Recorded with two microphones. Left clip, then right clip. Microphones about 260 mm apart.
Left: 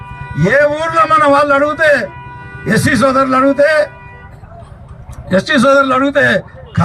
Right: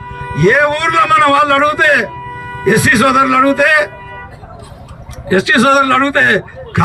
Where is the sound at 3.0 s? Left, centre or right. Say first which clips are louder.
Right 1 dB; right.